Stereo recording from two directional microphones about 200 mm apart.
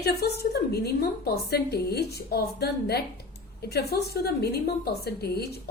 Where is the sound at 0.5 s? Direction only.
50° left (ahead or behind).